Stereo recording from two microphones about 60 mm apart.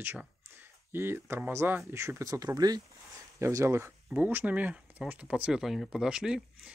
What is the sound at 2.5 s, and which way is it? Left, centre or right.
Speech, right.